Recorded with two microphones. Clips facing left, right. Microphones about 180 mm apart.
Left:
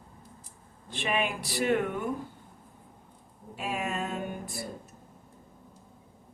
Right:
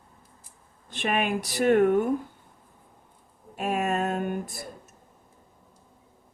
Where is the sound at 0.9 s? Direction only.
45° right (ahead or behind).